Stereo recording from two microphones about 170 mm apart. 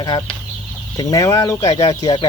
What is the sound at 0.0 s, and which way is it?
Speech, 25° left (ahead or behind).